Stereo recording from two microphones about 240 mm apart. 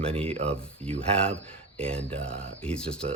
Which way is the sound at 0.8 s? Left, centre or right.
Centre.